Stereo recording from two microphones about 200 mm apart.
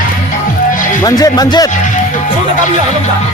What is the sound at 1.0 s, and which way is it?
Speech, 20° left (ahead or behind).